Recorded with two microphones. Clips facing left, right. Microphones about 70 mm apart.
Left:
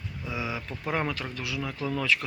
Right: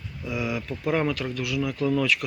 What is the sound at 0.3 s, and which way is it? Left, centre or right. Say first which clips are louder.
Speech: right 5 dB; left.